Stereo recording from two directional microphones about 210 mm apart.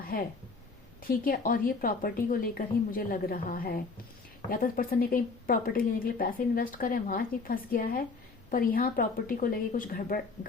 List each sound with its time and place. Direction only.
0.1 s a woman's voice: 45° left (ahead or behind)